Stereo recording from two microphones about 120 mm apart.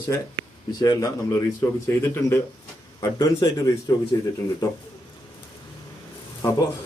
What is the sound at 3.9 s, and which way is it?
Speech, 25° left (ahead or behind).